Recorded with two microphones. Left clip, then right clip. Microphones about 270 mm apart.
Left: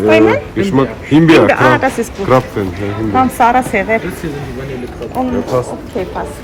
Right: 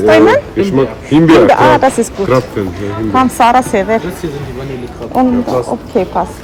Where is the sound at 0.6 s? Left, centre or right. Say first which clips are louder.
Right 2 dB; centre.